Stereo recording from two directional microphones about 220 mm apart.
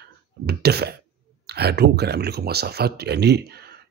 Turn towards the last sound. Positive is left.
turn(degrees=-45)  # may be behind; listen again after turning